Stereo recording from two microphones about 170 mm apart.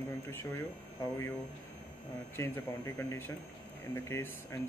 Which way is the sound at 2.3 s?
15° left (ahead or behind).